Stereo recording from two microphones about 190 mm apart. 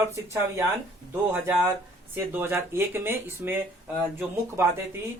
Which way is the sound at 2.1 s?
10° right (ahead or behind).